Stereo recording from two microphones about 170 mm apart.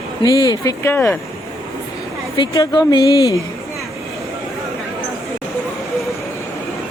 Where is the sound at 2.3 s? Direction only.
25° left (ahead or behind).